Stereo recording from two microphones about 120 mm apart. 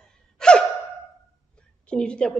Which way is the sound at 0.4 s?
5° left (ahead or behind).